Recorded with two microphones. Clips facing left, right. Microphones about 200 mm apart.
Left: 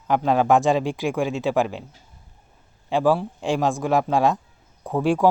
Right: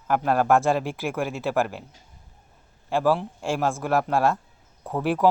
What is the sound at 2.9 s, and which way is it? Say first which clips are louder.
Speech: left 2 dB; 15° left (ahead or behind).